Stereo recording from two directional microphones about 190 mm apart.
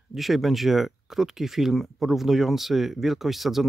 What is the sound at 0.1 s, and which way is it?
Speech, centre (ahead or behind).